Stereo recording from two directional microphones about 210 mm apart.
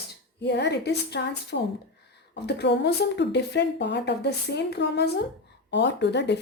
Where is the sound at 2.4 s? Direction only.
50° left (ahead or behind).